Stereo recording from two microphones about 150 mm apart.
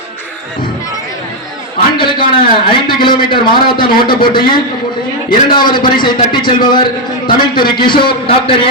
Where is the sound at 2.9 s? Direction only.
30° left (ahead or behind).